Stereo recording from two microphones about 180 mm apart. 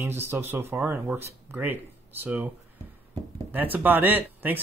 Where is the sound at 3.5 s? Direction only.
10° right (ahead or behind).